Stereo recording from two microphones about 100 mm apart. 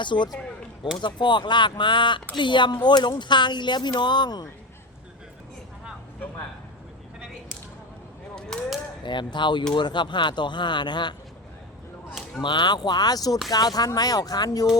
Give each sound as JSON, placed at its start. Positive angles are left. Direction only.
{"t": 0.0, "sound": "speech", "side_deg": 50}
{"t": 8.4, "sound": "a sound", "side_deg": 5}
{"t": 9.0, "sound": "speech", "side_deg": 50}
{"t": 12.4, "sound": "speech", "side_deg": 50}